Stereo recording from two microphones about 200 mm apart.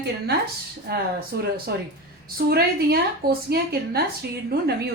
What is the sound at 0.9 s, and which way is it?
A woman's voice, 50° right (ahead or behind).